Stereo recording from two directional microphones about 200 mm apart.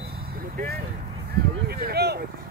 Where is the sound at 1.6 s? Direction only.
55° right (ahead or behind).